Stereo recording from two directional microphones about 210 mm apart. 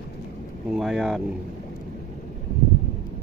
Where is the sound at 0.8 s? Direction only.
Centre (ahead or behind).